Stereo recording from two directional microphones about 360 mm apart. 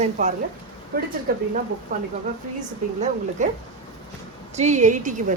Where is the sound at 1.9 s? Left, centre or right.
Right.